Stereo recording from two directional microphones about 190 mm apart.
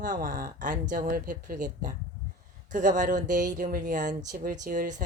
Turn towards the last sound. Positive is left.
turn(degrees=-45)  # may be behind; listen again after turning